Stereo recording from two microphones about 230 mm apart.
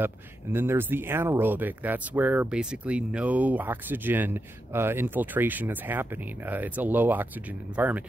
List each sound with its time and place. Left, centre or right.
0.0 s speech: centre